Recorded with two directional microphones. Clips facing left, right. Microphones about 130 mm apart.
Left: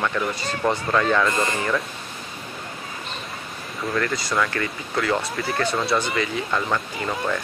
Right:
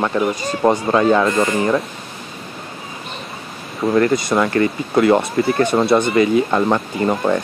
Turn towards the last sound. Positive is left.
turn(degrees=-30)  # may be behind; listen again after turning